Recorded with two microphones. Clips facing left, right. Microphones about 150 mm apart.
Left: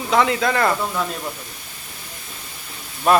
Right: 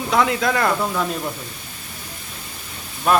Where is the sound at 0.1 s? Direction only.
Centre (ahead or behind).